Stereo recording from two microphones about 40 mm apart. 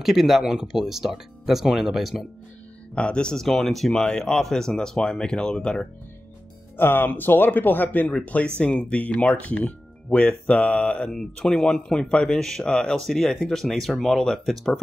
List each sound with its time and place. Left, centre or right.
0.0 s speech: centre
2.9 s speech: left
3.4 s speech: centre
3.9 s speech: centre
6.8 s speech: left
8.5 s speech: left
11.1 s speech: centre
14.4 s speech: centre